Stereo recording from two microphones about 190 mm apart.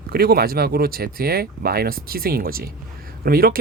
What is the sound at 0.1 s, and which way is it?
Speech, 55° right (ahead or behind).